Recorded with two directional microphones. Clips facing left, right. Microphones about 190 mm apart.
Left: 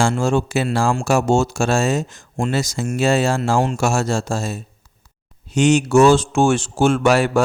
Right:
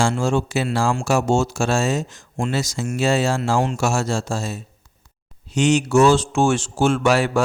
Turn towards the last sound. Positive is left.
turn(degrees=50)  # may be behind; listen again after turning